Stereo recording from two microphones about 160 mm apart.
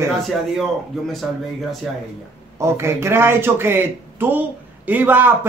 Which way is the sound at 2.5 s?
15° right (ahead or behind).